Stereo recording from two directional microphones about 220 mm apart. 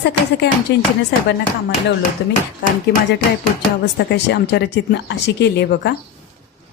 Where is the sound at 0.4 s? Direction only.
50° left (ahead or behind).